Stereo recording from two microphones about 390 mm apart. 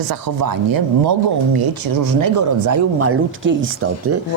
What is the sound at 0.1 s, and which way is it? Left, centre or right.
Speech, right.